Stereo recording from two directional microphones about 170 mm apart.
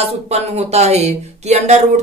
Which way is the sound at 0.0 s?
40° right (ahead or behind).